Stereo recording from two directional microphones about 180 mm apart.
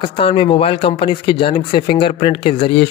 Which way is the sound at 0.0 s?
30° left (ahead or behind).